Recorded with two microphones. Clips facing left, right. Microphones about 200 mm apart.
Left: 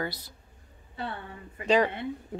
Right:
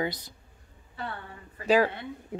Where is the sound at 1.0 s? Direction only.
25° left (ahead or behind).